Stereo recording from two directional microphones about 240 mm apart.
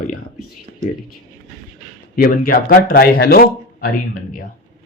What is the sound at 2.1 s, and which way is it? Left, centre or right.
Speech, left.